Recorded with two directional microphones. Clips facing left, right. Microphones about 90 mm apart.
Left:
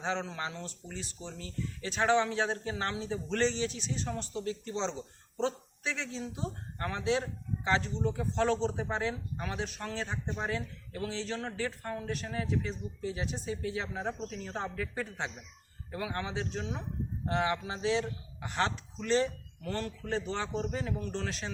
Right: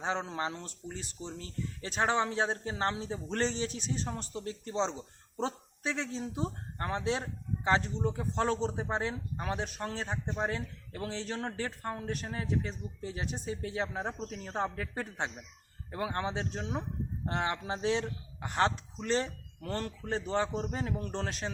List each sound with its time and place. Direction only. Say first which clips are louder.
0.0 s speech: right 1 dB; 35° right (ahead or behind)
5.4 s a sound: left 2 dB; 40° right (ahead or behind)
6.1 s speech: right 2 dB; 40° right (ahead or behind)
10.1 s speech: right 1 dB; 30° right (ahead or behind); by 21.5 s 45° right (ahead or behind)